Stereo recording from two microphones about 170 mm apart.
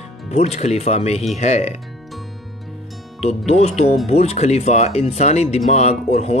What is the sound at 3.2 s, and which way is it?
Speech, 40° left (ahead or behind).